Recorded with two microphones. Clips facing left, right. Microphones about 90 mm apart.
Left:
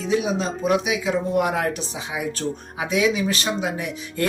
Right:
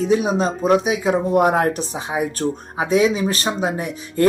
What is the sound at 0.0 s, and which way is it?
Speech, 45° right (ahead or behind).